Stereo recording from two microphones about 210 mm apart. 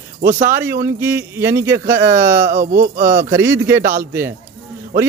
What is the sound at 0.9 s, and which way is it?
Speech, 10° right (ahead or behind).